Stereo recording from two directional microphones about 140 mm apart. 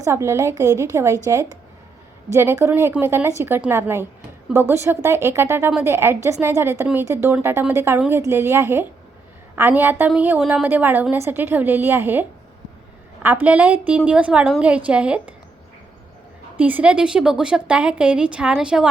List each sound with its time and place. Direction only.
0.0 s a woman's voice: 20° right (ahead or behind)
13.2 s a woman's voice: 15° right (ahead or behind)
16.6 s a woman's voice: 10° right (ahead or behind)